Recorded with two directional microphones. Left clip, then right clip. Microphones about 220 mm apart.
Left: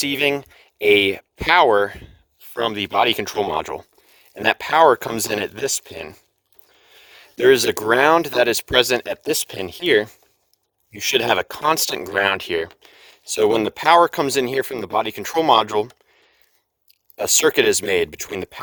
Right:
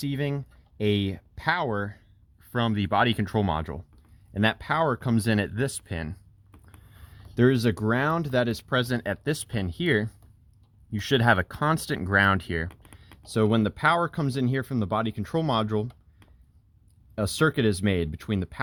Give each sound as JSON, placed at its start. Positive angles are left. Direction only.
{"t": 0.0, "sound": "speech", "side_deg": 35}
{"t": 2.6, "sound": "speech", "side_deg": 25}
{"t": 7.1, "sound": "speech", "side_deg": 40}
{"t": 13.0, "sound": "speech", "side_deg": 40}
{"t": 17.2, "sound": "speech", "side_deg": 40}